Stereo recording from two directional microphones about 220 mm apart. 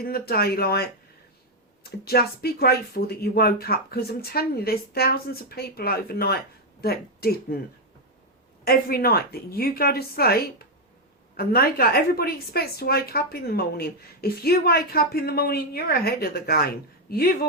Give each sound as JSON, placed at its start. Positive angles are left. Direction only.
{"t": 0.0, "sound": "a woman's voice", "side_deg": 45}
{"t": 8.6, "sound": "a woman's voice", "side_deg": 45}